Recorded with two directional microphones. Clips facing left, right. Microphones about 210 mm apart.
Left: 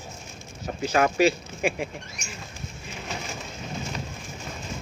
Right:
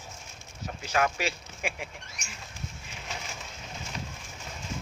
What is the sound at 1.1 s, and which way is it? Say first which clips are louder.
Speech: left 12 dB; 40° left (ahead or behind).